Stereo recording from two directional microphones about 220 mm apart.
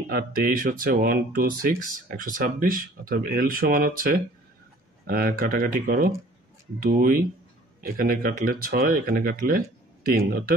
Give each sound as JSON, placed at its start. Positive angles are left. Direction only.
{"t": 0.1, "sound": "speech", "side_deg": -40}